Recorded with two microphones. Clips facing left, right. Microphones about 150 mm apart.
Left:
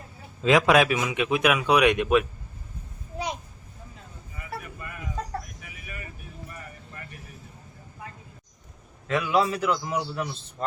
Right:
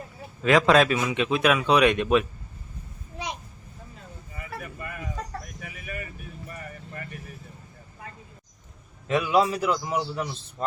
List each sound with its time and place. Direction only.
0.4 s a man's voice: 15° left (ahead or behind)
9.0 s a man's voice: 15° right (ahead or behind)